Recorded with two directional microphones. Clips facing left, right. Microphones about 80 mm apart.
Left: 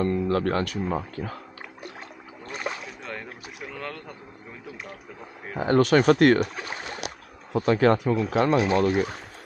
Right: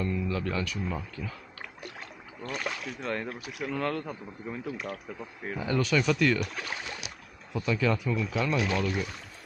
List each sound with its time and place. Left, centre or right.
0.0 s speech: left
2.4 s boat: left
3.0 s speech: centre
5.6 s speech: left
6.4 s boat: left
7.5 s speech: left
8.5 s speech: left